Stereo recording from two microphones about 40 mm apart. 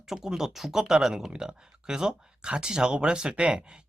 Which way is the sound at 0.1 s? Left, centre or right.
Centre.